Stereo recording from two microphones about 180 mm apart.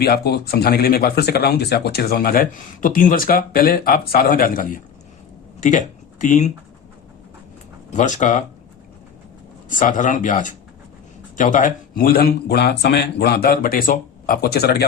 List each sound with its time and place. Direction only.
0.0 s speech: 60° left (ahead or behind); by 6.5 s 45° left (ahead or behind)
7.9 s speech: 45° left (ahead or behind)
9.6 s speech: 45° left (ahead or behind); by 14.8 s 65° left (ahead or behind)